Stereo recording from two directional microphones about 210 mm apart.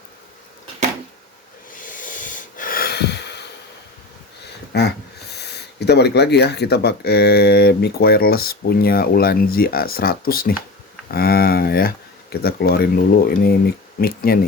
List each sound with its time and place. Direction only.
1.7 s snort: 40° left (ahead or behind)
4.7 s a sound: 50° left (ahead or behind)
5.3 s speech: 50° left (ahead or behind)